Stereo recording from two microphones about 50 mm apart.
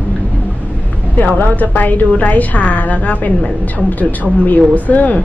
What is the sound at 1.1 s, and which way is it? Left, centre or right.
A woman's voice, left.